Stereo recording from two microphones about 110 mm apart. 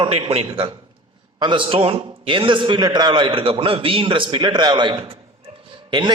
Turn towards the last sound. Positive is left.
turn(degrees=-45)  # may be behind; listen again after turning